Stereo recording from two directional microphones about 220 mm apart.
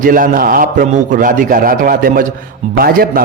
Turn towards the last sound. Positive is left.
turn(degrees=-40)  # may be behind; listen again after turning